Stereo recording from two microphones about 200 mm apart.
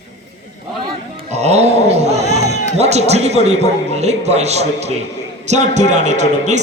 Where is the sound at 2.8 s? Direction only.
35° right (ahead or behind).